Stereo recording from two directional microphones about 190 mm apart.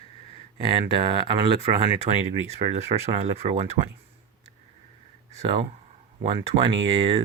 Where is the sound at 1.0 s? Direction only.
30° right (ahead or behind).